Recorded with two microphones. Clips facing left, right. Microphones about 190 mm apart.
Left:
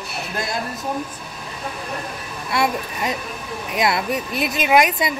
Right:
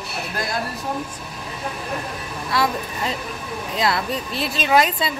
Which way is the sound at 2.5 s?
20° left (ahead or behind).